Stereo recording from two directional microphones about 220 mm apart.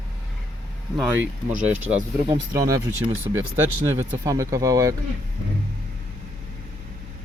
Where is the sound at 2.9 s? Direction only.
60° right (ahead or behind).